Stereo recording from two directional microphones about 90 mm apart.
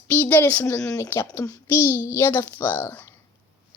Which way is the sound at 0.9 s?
30° left (ahead or behind).